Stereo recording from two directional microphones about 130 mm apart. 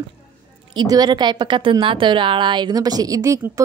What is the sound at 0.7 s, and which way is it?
A woman's voice, 30° right (ahead or behind).